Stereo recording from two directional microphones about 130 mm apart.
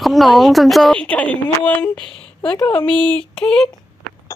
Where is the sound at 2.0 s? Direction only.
40° left (ahead or behind).